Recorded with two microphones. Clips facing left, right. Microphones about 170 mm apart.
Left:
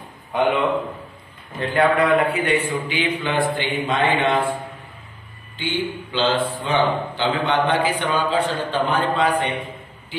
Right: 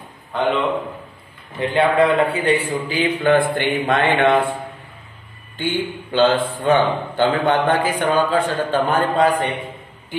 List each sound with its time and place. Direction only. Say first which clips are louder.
1.6 s a man's voice: right 2 dB; 25° right (ahead or behind)
3.2 s a sound: right 6 dB; 55° right (ahead or behind)
5.6 s a man's voice: right 2 dB; 50° right (ahead or behind)